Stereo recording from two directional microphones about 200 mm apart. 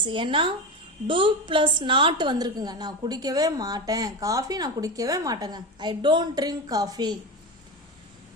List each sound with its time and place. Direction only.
0.0 s a woman's voice: 25° right (ahead or behind)